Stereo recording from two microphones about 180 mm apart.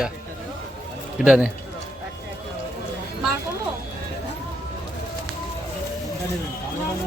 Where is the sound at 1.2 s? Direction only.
5° right (ahead or behind).